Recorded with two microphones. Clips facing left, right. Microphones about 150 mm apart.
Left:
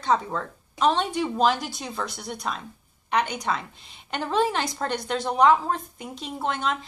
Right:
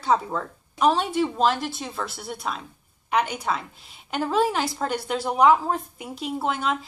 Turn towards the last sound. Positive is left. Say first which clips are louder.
# right 2 dB
turn(degrees=-5)  # may be behind; listen again after turning